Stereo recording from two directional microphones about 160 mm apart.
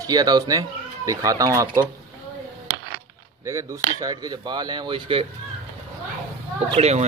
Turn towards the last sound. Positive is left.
turn(degrees=-40)  # may be behind; listen again after turning